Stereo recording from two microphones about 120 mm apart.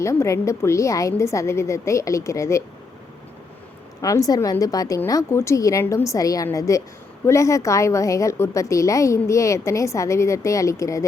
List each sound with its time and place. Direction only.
0.0 s a woman's voice: 25° left (ahead or behind)
4.0 s a woman's voice: 30° left (ahead or behind)